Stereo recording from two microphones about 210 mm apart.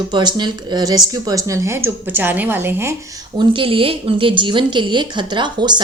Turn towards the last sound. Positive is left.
turn(degrees=-20)  # may be behind; listen again after turning